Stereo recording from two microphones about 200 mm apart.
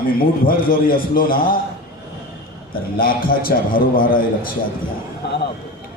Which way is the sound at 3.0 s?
45° left (ahead or behind).